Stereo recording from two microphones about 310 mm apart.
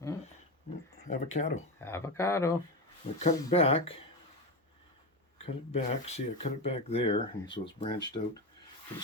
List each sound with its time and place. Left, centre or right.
1.1 s speech: left
1.8 s speech: centre
3.2 s speech: centre
5.4 s speech: centre